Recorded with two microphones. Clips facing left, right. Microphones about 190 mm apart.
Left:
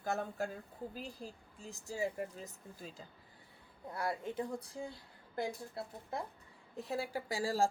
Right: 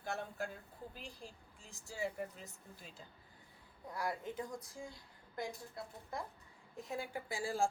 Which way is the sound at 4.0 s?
25° left (ahead or behind).